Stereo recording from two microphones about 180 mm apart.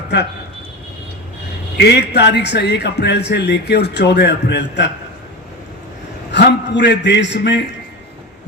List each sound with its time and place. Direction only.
1.8 s a man's voice: 70° left (ahead or behind)
6.3 s a man's voice: 75° left (ahead or behind)